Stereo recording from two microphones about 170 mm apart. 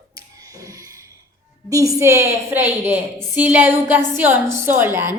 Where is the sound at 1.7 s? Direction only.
20° right (ahead or behind).